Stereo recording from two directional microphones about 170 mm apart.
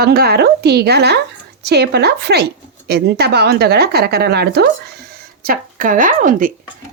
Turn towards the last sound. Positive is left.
turn(degrees=-50)  # may be behind; listen again after turning